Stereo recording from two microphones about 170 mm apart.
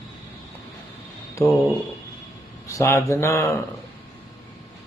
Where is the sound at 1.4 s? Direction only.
20° left (ahead or behind).